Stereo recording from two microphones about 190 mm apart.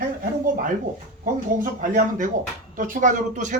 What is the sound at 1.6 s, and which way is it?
A man's voice, 45° right (ahead or behind).